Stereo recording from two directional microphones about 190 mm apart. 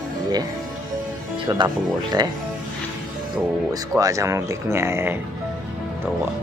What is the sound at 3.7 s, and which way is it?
Speech, 15° right (ahead or behind).